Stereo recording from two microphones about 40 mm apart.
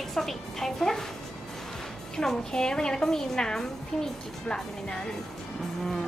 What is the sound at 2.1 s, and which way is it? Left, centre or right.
A woman's voice, centre.